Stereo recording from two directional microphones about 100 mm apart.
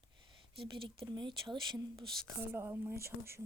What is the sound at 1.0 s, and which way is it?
Speech, 50° right (ahead or behind).